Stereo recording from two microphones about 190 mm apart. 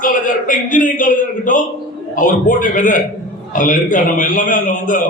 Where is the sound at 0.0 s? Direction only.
45° left (ahead or behind).